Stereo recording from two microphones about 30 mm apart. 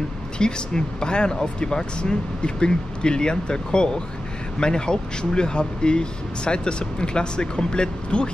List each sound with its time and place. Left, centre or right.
0.4 s speech: left